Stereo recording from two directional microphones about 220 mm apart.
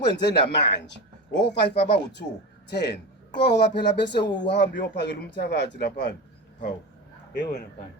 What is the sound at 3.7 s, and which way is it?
Speech, 50° left (ahead or behind).